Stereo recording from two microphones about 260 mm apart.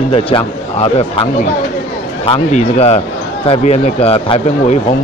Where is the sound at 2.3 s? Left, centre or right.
Left.